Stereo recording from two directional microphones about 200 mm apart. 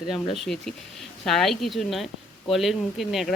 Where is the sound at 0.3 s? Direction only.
Centre (ahead or behind).